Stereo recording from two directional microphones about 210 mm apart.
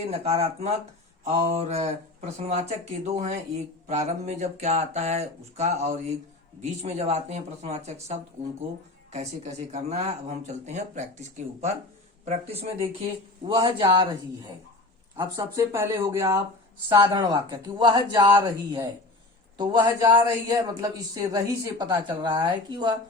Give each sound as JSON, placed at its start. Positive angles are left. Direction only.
{"t": 0.1, "sound": "a woman's voice", "side_deg": -30}